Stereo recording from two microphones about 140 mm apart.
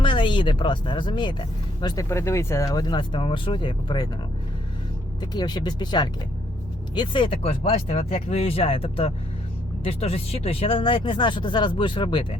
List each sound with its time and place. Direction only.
0.0 s speech: 35° left (ahead or behind)
2.0 s speech: 20° left (ahead or behind)
5.2 s speech: 30° left (ahead or behind)